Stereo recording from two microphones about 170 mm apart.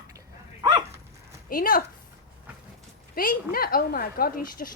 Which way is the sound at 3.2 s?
60° left (ahead or behind).